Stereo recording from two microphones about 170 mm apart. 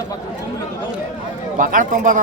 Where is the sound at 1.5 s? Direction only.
50° right (ahead or behind).